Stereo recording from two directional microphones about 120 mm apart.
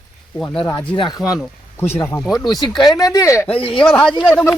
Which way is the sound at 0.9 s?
40° left (ahead or behind).